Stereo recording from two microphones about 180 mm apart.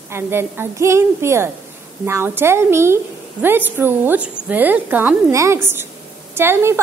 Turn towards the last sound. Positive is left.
turn(degrees=-15)  # may be behind; listen again after turning